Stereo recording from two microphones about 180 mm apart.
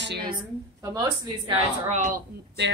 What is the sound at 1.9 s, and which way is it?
Speech, 45° right (ahead or behind).